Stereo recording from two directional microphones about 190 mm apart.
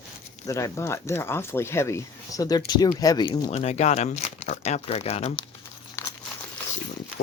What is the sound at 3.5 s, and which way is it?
Speech, 35° left (ahead or behind).